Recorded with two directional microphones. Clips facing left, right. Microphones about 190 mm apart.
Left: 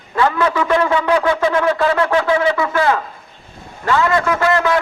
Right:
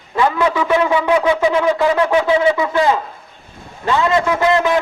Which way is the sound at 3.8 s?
20° right (ahead or behind).